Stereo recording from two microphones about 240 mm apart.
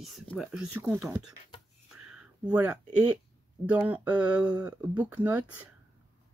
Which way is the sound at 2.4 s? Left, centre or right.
Centre.